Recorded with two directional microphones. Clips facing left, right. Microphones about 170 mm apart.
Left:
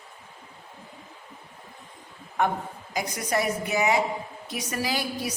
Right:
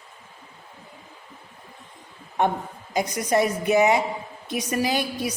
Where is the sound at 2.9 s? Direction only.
25° right (ahead or behind).